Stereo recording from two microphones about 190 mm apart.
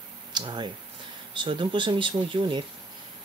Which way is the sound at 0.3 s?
25° right (ahead or behind).